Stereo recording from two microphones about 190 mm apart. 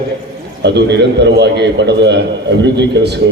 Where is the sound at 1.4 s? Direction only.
65° right (ahead or behind).